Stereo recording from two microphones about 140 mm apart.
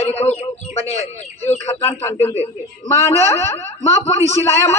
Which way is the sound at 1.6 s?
20° left (ahead or behind).